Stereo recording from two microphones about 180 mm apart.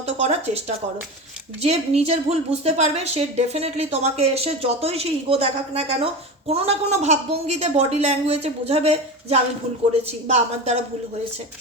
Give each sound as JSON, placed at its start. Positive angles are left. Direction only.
{"t": 0.0, "sound": "speech", "side_deg": -35}
{"t": 1.6, "sound": "a woman's voice", "side_deg": -35}